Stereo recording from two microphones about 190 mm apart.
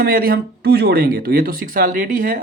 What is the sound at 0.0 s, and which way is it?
Speech, 50° right (ahead or behind).